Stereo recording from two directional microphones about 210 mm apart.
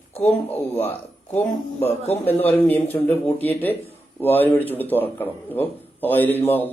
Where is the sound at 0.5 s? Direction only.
10° left (ahead or behind).